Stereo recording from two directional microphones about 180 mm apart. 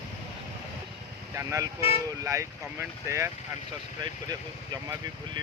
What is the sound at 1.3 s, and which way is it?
Speech, 15° right (ahead or behind).